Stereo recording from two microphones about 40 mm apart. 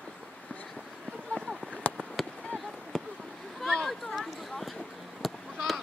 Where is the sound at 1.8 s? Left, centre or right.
Left.